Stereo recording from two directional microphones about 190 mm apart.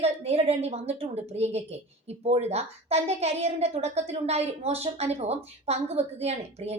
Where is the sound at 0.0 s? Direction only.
30° right (ahead or behind).